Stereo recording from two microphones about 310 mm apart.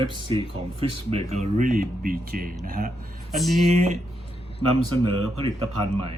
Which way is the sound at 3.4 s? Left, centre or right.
Centre.